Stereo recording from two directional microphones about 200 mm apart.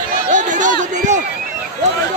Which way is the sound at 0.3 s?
40° right (ahead or behind).